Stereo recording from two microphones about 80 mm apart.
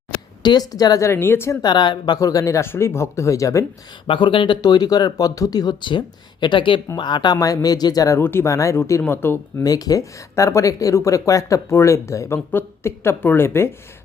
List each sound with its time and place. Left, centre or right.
0.4 s speech: left
1.0 s speech: left
1.6 s speech: left
2.1 s speech: left
2.6 s speech: left
4.0 s speech: left
5.8 s speech: left
6.9 s speech: left
7.3 s speech: left
8.2 s speech: left
9.6 s speech: left